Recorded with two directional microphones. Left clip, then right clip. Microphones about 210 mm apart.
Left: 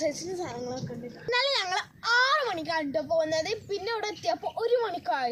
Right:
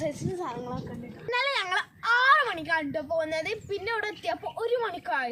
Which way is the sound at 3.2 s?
15° right (ahead or behind).